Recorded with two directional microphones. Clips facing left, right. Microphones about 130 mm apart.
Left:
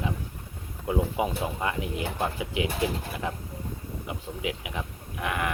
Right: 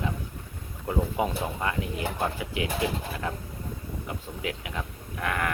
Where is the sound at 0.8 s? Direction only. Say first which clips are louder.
Left 1 dB; 15° left (ahead or behind).